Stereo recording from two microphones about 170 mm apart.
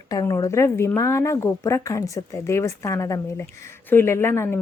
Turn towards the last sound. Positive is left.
turn(degrees=15)  # may be behind; listen again after turning